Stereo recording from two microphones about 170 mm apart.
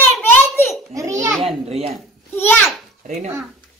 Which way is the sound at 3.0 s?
45° right (ahead or behind).